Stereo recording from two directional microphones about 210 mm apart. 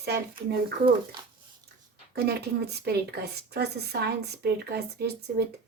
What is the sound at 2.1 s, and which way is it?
A woman's voice, 50° right (ahead or behind).